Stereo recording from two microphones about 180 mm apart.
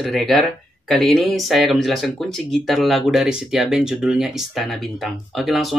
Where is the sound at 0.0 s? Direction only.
Centre (ahead or behind).